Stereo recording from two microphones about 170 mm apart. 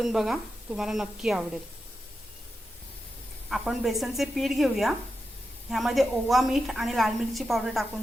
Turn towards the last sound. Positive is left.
turn(degrees=0)  # may be behind; listen again after turning